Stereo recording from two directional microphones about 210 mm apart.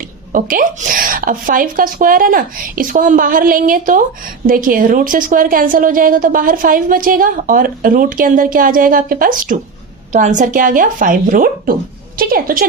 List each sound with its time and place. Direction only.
0.3 s a woman's voice: 40° right (ahead or behind)